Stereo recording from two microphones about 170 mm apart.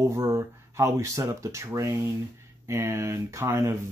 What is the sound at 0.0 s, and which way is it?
Speech, 15° right (ahead or behind).